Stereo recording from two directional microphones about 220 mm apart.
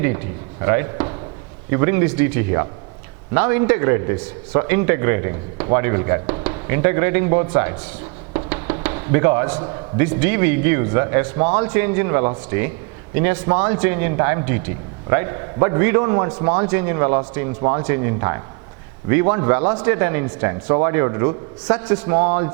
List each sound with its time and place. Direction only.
0.6 s a man's voice: 15° right (ahead or behind)